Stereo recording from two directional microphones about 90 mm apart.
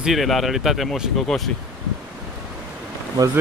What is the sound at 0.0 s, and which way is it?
Speech, centre (ahead or behind).